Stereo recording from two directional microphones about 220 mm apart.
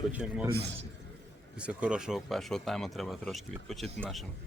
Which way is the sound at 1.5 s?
5° right (ahead or behind).